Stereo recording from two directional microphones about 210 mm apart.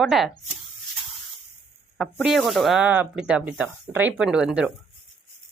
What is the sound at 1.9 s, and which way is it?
Speech, centre (ahead or behind).